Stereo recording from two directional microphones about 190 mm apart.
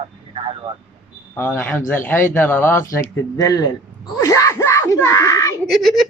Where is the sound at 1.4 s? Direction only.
10° left (ahead or behind).